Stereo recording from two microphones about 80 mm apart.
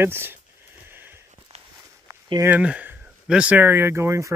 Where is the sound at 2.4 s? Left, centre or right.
Centre.